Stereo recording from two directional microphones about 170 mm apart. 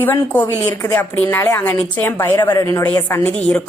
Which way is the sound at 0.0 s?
10° left (ahead or behind).